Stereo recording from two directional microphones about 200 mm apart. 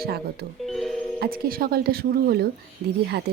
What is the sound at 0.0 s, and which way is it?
Speech, 50° right (ahead or behind).